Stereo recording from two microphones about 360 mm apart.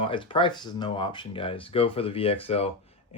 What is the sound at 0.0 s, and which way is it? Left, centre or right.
Speech, centre.